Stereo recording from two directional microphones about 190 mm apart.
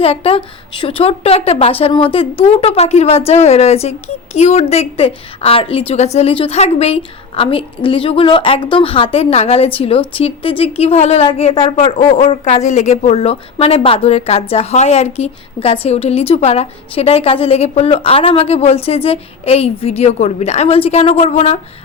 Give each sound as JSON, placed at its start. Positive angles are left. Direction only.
{"t": 0.0, "sound": "a woman's voice", "side_deg": 30}